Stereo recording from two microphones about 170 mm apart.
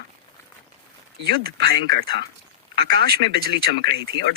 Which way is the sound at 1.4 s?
65° right (ahead or behind).